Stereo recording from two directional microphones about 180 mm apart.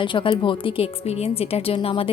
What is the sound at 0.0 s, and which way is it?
A woman's voice, 25° left (ahead or behind).